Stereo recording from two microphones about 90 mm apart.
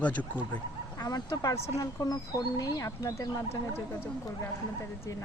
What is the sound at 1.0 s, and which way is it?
Speech, 45° left (ahead or behind).